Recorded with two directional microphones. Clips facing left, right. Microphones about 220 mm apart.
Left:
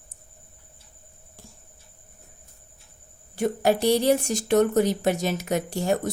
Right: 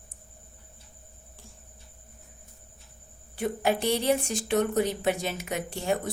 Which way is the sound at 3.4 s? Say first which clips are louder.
Left 5 dB; 40° left (ahead or behind).